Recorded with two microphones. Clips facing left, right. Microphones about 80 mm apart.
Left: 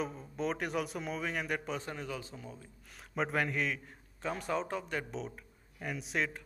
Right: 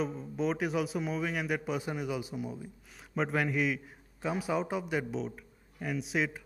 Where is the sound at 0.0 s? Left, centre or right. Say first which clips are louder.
Right 4 dB; centre.